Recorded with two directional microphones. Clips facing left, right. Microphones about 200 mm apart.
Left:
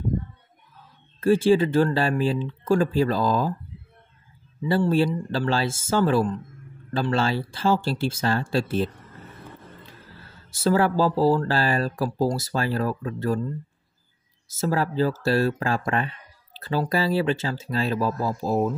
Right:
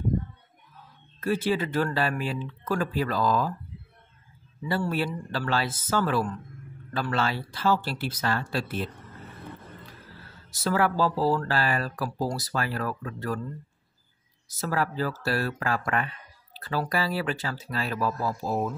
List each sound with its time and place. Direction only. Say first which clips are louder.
1.2 s speech: left 8 dB; 30° left (ahead or behind)
4.6 s speech: left 7 dB; 25° left (ahead or behind)
10.5 s speech: left 4 dB; 30° left (ahead or behind)
14.5 s speech: left 4 dB; 25° left (ahead or behind)